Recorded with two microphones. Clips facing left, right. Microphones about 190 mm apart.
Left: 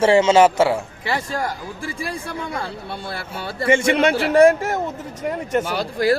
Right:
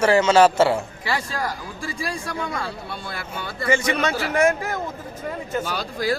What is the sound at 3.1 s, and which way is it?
A man's voice, 30° left (ahead or behind).